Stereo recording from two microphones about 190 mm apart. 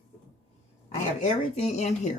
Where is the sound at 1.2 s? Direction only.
40° left (ahead or behind).